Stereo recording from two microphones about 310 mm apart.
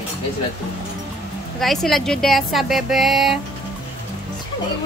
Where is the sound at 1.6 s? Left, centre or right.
Centre.